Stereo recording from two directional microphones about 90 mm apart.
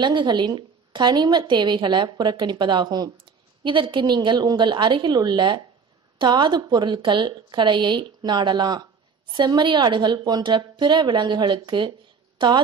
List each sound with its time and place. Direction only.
0.0 s a woman's voice: 60° right (ahead or behind)
3.6 s a woman's voice: 65° right (ahead or behind)